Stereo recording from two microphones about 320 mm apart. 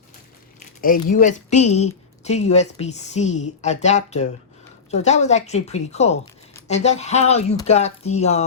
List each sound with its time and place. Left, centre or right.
0.8 s a woman's voice: left